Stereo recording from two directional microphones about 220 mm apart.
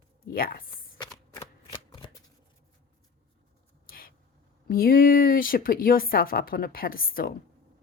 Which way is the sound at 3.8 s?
40° left (ahead or behind).